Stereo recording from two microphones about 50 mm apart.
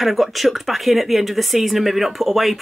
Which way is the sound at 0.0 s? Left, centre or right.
Centre.